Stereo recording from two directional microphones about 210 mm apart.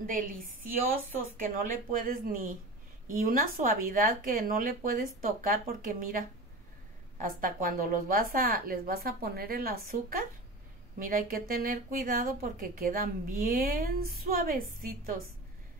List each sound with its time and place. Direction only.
0.7 s a woman's voice: 45° right (ahead or behind)